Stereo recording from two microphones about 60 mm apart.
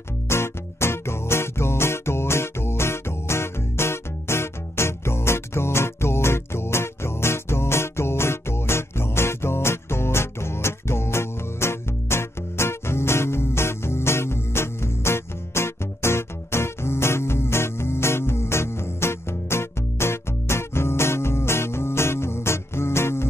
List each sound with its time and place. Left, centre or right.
0.3 s music: left